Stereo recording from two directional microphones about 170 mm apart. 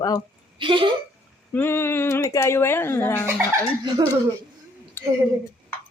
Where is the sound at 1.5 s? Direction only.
15° left (ahead or behind).